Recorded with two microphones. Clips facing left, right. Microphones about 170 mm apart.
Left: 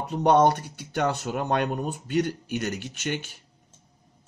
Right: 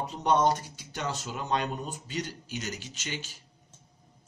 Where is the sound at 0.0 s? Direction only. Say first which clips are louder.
Left 6 dB; 60° left (ahead or behind).